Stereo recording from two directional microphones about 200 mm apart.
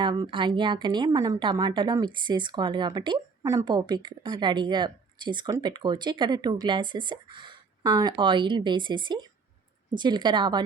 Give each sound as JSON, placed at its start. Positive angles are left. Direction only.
{"t": 0.0, "sound": "a woman's voice", "side_deg": -20}